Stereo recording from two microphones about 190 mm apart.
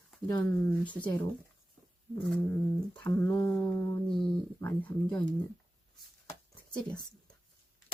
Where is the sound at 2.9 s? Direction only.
10° left (ahead or behind).